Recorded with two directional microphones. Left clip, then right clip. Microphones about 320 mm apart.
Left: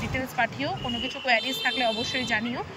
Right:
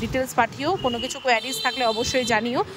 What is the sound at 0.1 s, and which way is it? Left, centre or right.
Speech, centre.